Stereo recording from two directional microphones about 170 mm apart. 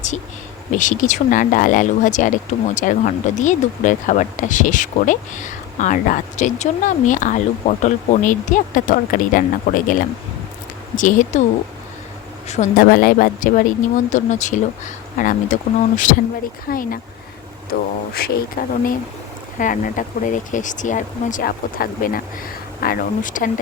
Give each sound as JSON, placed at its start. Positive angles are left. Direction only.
{"t": 0.7, "sound": "speech", "side_deg": 50}
{"t": 12.5, "sound": "speech", "side_deg": 45}
{"t": 16.6, "sound": "speech", "side_deg": 55}